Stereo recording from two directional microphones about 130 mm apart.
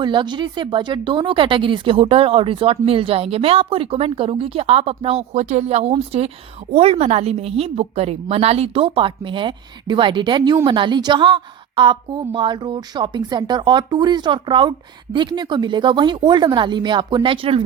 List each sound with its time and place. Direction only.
0.0 s a woman's voice: 35° right (ahead or behind)